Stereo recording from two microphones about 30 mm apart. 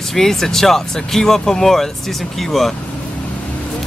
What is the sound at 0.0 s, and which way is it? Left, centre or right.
Speech, centre.